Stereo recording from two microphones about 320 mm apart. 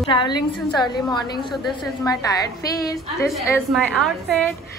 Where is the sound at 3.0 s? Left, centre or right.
Centre.